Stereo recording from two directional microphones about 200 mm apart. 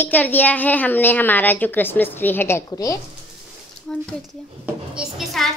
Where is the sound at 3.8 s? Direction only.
5° left (ahead or behind).